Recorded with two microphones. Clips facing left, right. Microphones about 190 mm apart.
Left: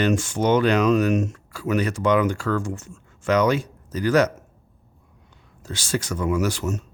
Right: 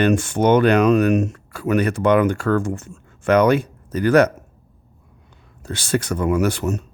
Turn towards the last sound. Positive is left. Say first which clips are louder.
# right 4 dB
turn(degrees=-60)  # may be behind; listen again after turning